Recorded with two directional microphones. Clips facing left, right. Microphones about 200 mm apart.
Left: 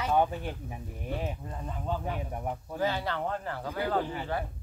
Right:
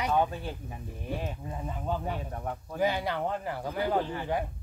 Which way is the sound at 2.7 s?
15° right (ahead or behind).